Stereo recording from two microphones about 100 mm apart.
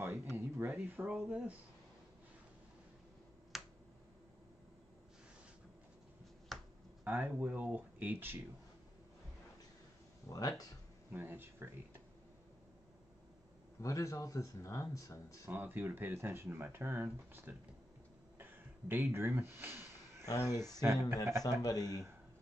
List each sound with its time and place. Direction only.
0.0 s a sound: 25° right (ahead or behind)
3.5 s finger snapping: centre (ahead or behind)
6.5 s finger snapping: centre (ahead or behind)
7.1 s speech: 15° right (ahead or behind)
11.1 s speech: 20° right (ahead or behind)
13.7 s a man's voice: 30° left (ahead or behind)
15.5 s speech: 20° right (ahead or behind)
18.4 s a sound: 20° right (ahead or behind)
20.4 s speech: 30° right (ahead or behind)
21.5 s a man's voice: 40° left (ahead or behind)
21.8 s speech: 30° right (ahead or behind)